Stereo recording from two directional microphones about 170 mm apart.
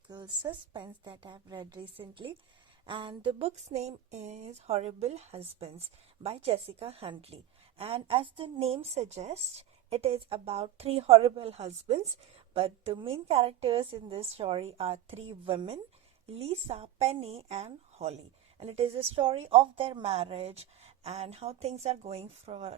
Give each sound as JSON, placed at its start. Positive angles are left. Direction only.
{"t": 0.1, "sound": "a woman's voice", "side_deg": -25}